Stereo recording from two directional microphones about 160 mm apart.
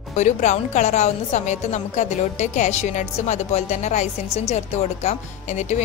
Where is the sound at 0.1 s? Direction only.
45° left (ahead or behind).